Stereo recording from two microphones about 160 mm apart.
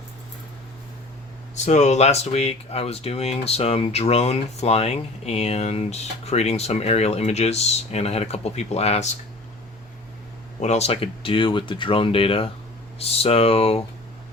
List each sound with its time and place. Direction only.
1.5 s speech: 45° left (ahead or behind)
10.6 s speech: 45° left (ahead or behind)